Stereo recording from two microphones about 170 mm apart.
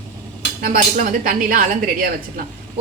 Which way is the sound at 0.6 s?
55° right (ahead or behind).